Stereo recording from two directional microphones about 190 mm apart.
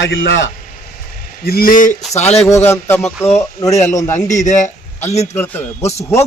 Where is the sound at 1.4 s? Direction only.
50° left (ahead or behind).